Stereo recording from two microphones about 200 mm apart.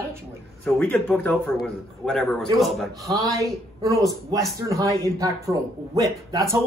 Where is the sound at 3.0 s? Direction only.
15° right (ahead or behind).